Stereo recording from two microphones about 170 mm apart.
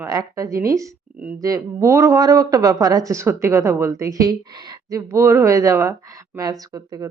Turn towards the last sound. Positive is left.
turn(degrees=-20)  # may be behind; listen again after turning